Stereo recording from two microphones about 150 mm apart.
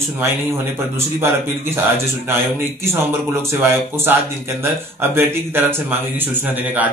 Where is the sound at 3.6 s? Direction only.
15° right (ahead or behind).